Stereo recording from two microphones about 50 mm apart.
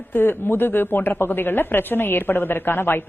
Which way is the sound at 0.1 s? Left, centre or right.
Left.